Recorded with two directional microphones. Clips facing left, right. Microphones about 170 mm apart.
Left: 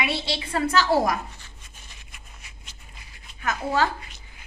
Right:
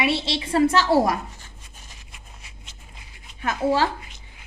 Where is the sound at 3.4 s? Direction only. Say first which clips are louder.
Right 3 dB; 30° right (ahead or behind).